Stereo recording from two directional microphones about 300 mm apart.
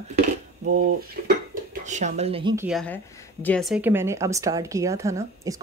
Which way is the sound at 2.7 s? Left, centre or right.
Centre.